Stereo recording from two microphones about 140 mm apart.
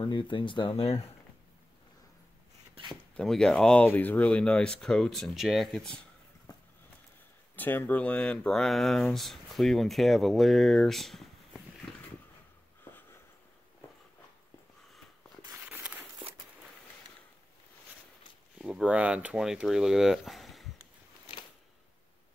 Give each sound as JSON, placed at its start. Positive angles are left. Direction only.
{"t": 0.0, "sound": "speech", "side_deg": 35}
{"t": 2.9, "sound": "speech", "side_deg": 5}
{"t": 7.5, "sound": "speech", "side_deg": 15}
{"t": 15.4, "sound": "a sound", "side_deg": -15}
{"t": 18.6, "sound": "speech", "side_deg": -5}